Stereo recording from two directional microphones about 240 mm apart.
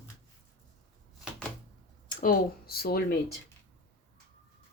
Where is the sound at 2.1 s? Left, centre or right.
Left.